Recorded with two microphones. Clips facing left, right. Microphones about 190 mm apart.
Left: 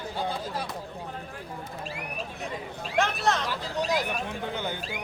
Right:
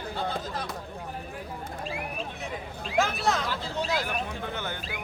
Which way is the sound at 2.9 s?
Centre (ahead or behind).